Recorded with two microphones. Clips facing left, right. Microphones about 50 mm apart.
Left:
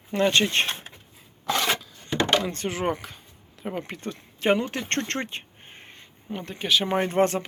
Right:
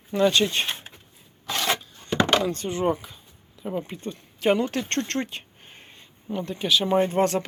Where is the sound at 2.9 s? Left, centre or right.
Left.